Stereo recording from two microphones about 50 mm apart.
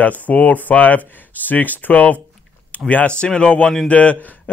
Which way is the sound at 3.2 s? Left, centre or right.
Centre.